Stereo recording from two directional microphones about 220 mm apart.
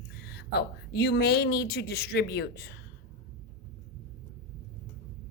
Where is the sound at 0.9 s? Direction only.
50° left (ahead or behind).